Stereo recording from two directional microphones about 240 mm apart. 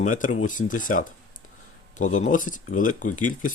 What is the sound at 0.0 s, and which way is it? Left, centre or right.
Speech, left.